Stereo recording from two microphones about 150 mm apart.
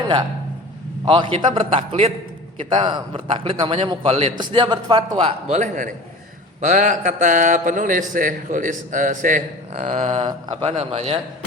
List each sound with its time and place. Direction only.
1.0 s a man's voice: 35° right (ahead or behind)
4.4 s a man's voice: 30° right (ahead or behind)
5.5 s a man's voice: 60° right (ahead or behind)
9.9 s a man's voice: 40° right (ahead or behind)